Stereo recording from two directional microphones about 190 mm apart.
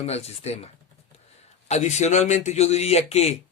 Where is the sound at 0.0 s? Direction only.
35° left (ahead or behind).